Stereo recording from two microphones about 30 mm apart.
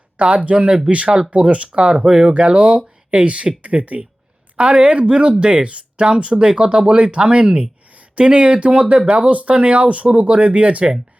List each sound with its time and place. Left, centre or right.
0.2 s speech: right
2.0 s speech: right
2.5 s speech: right
4.5 s speech: right
9.3 s speech: right